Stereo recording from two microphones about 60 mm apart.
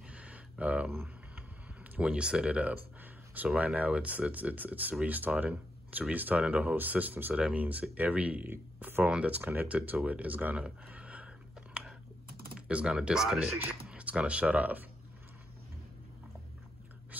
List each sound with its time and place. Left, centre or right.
0.1 s a sound: right
2.0 s speech: centre
2.7 s a sound: right
3.5 s speech: right
9.4 s speech: right
12.5 s typing: centre
12.9 s speech: centre
13.5 s speech: right
17.1 s a sound: right